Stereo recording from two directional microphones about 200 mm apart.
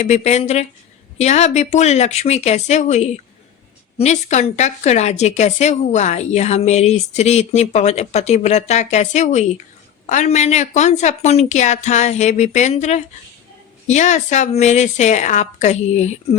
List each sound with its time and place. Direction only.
0.0 s speech: 35° left (ahead or behind)